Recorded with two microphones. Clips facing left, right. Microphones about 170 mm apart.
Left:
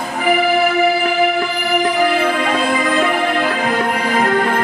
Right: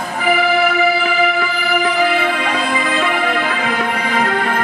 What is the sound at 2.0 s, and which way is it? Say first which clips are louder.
Music: left 1 dB; 45° left (ahead or behind).